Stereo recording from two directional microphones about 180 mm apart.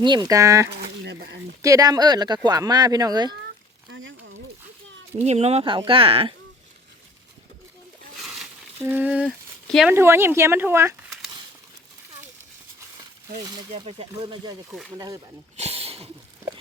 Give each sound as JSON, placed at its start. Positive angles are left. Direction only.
{"t": 0.0, "sound": "speech", "side_deg": -25}
{"t": 0.7, "sound": "a sound", "side_deg": -65}
{"t": 1.6, "sound": "speech", "side_deg": -20}
{"t": 3.8, "sound": "a sound", "side_deg": -90}
{"t": 5.1, "sound": "speech", "side_deg": -40}
{"t": 8.2, "sound": "a sound", "side_deg": 0}
{"t": 9.6, "sound": "speech", "side_deg": 0}
{"t": 9.9, "sound": "speech", "side_deg": -15}
{"t": 13.4, "sound": "speech", "side_deg": -20}
{"t": 14.7, "sound": "speech", "side_deg": 0}
{"t": 14.9, "sound": "speech", "side_deg": -20}
{"t": 15.5, "sound": "a sound", "side_deg": -35}